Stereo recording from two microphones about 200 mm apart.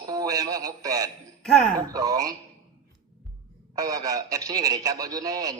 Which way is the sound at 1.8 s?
20° right (ahead or behind).